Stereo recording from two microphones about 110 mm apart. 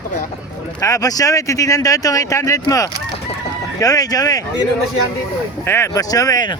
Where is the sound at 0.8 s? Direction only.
30° left (ahead or behind).